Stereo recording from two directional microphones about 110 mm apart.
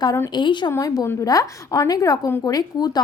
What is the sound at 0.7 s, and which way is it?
A woman's voice, 30° left (ahead or behind).